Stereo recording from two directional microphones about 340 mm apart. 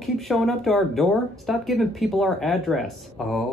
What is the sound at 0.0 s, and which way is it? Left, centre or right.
Speech, centre.